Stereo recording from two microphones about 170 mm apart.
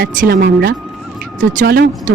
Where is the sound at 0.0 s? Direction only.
65° right (ahead or behind).